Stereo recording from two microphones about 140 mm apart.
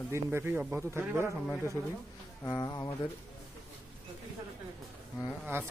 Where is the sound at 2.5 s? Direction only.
25° left (ahead or behind).